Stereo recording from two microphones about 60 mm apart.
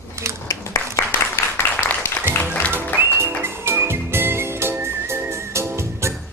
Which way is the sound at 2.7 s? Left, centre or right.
Right.